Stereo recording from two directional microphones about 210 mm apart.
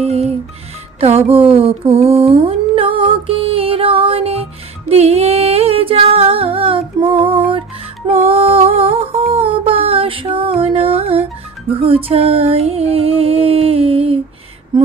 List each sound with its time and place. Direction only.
0.0 s music: 30° right (ahead or behind)